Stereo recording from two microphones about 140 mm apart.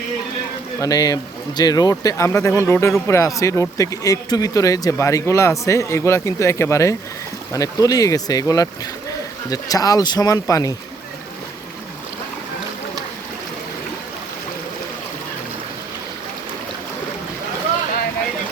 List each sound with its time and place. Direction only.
0.8 s speech: 25° left (ahead or behind)